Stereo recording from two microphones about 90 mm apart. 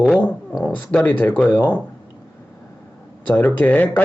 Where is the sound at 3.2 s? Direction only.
20° left (ahead or behind).